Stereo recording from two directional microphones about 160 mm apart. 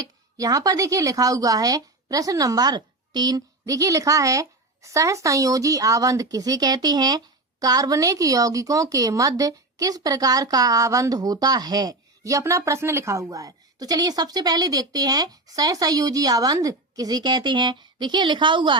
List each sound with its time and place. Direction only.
0.0 s speech: 25° right (ahead or behind)